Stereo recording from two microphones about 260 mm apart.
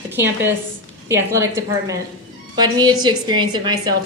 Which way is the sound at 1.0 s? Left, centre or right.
Centre.